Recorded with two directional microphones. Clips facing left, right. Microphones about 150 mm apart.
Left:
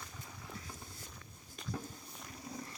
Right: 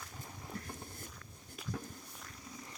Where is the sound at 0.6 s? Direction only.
55° right (ahead or behind).